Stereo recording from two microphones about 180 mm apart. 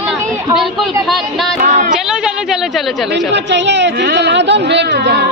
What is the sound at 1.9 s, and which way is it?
A woman's voice, 5° right (ahead or behind).